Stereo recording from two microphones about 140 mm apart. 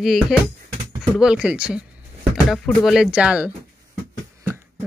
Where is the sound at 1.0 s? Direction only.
5° right (ahead or behind).